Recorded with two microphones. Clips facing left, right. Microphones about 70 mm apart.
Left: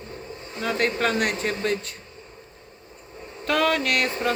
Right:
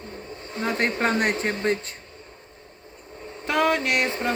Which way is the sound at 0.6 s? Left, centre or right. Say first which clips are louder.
Even; right.